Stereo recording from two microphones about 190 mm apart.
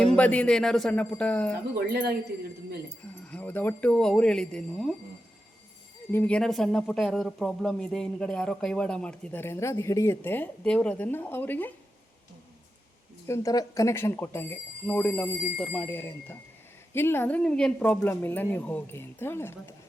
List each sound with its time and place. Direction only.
0.0 s speech: 5° left (ahead or behind)
1.7 s speech: 55° right (ahead or behind)
3.0 s speech: 5° left (ahead or behind)
6.1 s speech: 10° left (ahead or behind)
13.2 s speech: 15° left (ahead or behind)